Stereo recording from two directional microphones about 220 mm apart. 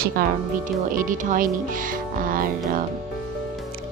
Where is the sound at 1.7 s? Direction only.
40° right (ahead or behind).